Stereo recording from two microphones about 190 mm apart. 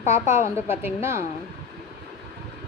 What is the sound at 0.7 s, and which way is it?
Speech, 10° right (ahead or behind).